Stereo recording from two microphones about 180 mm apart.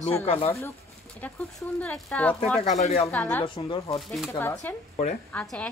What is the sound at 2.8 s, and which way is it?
Speech, 35° left (ahead or behind).